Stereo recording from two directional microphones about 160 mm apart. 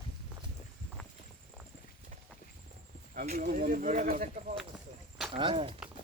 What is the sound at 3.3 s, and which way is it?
Speech, 60° right (ahead or behind).